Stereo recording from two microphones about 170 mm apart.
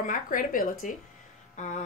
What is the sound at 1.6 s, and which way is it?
Speech, 45° left (ahead or behind).